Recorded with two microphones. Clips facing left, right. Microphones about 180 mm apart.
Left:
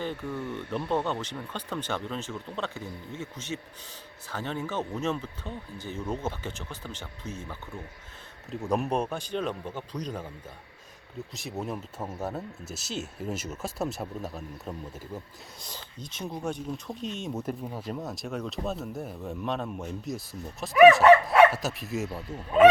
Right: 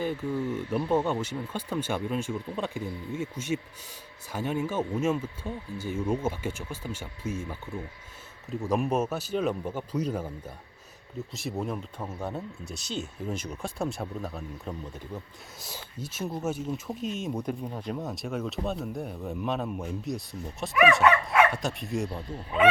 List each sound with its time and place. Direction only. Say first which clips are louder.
0.0 s speech: right 4 dB; 10° right (ahead or behind)
11.3 s speech: right 2 dB; centre (ahead or behind)
15.6 s speech: right 4 dB; 5° right (ahead or behind)
21.0 s dog: left 6 dB; 35° left (ahead or behind)
21.5 s speech: right 1 dB; 5° left (ahead or behind)